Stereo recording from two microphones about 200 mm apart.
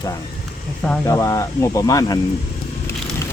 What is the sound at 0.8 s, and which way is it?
Speech, 10° left (ahead or behind).